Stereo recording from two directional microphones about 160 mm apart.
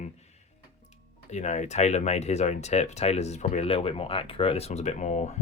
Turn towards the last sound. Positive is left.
turn(degrees=45)  # may be behind; listen again after turning